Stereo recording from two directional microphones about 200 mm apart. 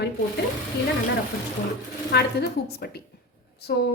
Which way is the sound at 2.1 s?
55° left (ahead or behind).